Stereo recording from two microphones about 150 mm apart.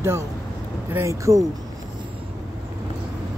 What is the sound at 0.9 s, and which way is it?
Speech, 20° right (ahead or behind).